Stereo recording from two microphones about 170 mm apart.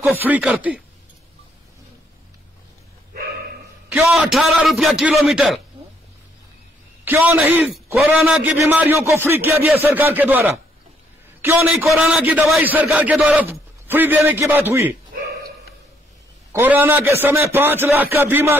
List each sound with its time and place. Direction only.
0.0 s a man's voice: 10° right (ahead or behind)
3.2 s a sound: 65° right (ahead or behind)
3.9 s a man's voice: 5° right (ahead or behind)
7.1 s a man's voice: 10° right (ahead or behind)
8.5 s a man's voice: 15° right (ahead or behind)
11.4 s a man's voice: 15° right (ahead or behind)
12.0 s a man's voice: centre (ahead or behind)
16.5 s a man's voice: 10° right (ahead or behind)